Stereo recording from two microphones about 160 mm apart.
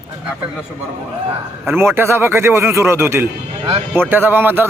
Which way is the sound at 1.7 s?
15° right (ahead or behind).